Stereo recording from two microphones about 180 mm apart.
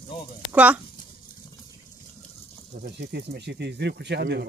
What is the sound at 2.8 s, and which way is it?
Speech, 60° right (ahead or behind).